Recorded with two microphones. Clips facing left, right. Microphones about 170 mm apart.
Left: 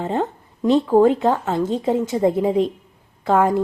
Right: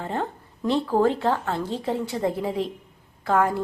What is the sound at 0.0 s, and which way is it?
A woman's voice, 20° left (ahead or behind).